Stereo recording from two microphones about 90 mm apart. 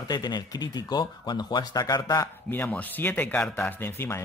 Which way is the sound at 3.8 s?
30° left (ahead or behind).